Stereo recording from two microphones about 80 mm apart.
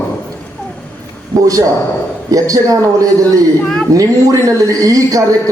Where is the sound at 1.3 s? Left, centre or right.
Right.